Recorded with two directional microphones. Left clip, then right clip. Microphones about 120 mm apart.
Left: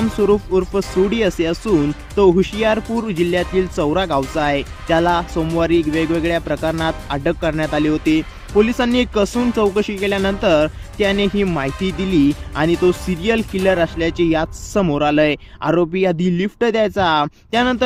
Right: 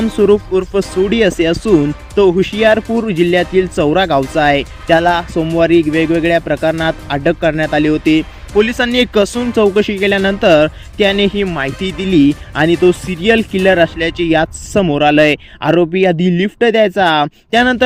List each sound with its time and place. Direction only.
0.2 s speech: 25° right (ahead or behind)